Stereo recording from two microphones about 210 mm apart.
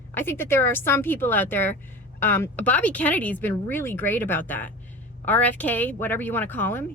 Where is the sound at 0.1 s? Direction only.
10° left (ahead or behind).